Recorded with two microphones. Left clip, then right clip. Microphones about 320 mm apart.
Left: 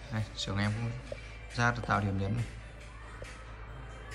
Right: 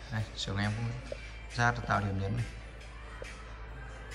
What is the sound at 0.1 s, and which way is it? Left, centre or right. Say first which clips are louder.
A man's voice: left 1 dB; centre.